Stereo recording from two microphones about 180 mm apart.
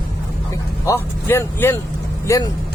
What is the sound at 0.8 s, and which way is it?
Speech, 15° left (ahead or behind).